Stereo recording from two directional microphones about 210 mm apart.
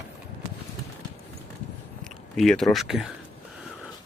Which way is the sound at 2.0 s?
5° left (ahead or behind).